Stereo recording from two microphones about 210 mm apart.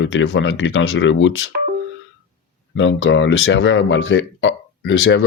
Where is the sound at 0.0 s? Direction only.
60° left (ahead or behind).